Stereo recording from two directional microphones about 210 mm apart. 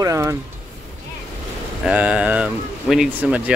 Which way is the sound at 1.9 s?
5° right (ahead or behind).